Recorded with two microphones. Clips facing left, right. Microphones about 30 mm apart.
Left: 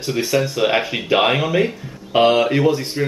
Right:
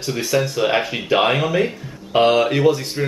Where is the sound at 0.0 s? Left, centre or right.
Centre.